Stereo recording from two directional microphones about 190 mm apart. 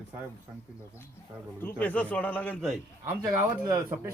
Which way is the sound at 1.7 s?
10° left (ahead or behind).